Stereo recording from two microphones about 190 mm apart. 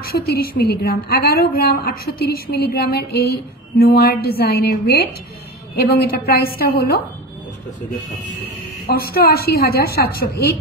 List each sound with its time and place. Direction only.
0.0 s a woman's voice: 55° left (ahead or behind)
8.8 s a woman's voice: 55° left (ahead or behind)